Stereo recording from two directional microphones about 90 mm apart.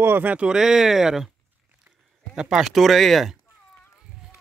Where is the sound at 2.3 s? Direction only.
5° right (ahead or behind).